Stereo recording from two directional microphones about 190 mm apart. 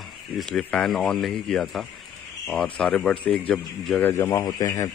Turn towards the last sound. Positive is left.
turn(degrees=15)  # may be behind; listen again after turning